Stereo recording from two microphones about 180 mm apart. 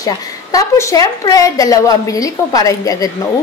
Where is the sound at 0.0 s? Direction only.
20° left (ahead or behind).